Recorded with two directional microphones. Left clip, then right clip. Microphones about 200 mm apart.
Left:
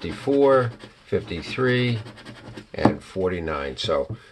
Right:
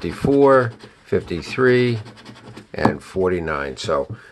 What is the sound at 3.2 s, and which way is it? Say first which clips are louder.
Speech: right 4 dB; 30° right (ahead or behind).